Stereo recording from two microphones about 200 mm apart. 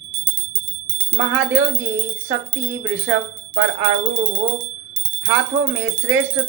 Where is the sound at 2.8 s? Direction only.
65° right (ahead or behind).